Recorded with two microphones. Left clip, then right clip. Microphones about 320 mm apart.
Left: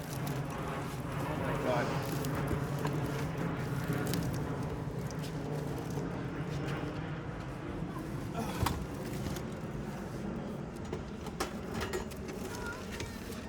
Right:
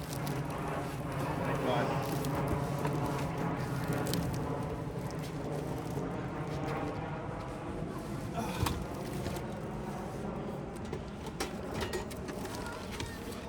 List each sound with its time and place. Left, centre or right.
1.2 s music: centre